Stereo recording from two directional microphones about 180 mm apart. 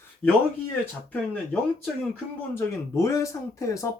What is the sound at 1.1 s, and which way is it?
Speech, 10° left (ahead or behind).